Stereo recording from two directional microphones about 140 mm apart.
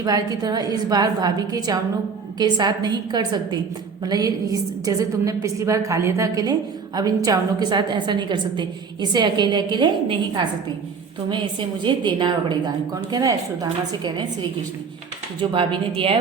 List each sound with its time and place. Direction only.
0.0 s a woman's voice: 25° right (ahead or behind)
11.8 s a woman's voice: 35° right (ahead or behind)
15.4 s a woman's voice: 35° right (ahead or behind)